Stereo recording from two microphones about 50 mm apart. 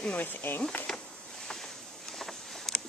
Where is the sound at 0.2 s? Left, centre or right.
Left.